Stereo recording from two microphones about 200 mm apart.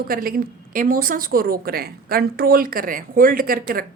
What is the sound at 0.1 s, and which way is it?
Speech, 45° right (ahead or behind).